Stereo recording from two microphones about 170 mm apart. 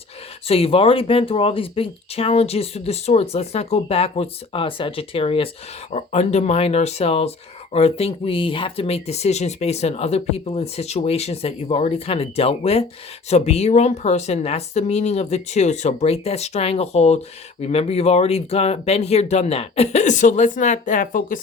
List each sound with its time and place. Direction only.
0.4 s speech: 35° left (ahead or behind); by 21.4 s 55° left (ahead or behind)